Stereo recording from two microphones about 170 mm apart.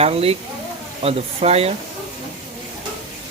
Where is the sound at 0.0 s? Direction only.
35° right (ahead or behind).